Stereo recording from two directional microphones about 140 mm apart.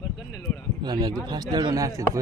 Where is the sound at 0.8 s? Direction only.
30° right (ahead or behind).